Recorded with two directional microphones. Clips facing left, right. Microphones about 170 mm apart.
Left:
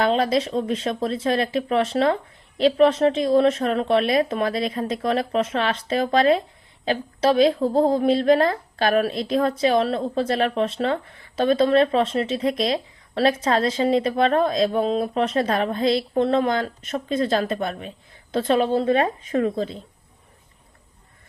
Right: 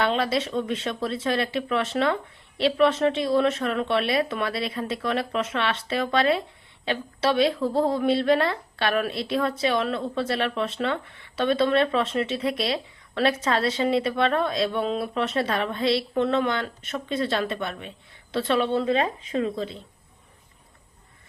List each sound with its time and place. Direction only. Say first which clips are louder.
0.0 s a woman's voice: left 4 dB; 40° left (ahead or behind)